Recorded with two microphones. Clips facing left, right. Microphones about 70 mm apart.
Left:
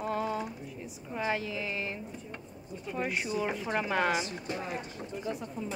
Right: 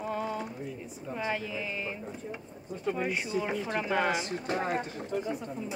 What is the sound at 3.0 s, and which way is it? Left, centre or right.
A woman's voice, centre.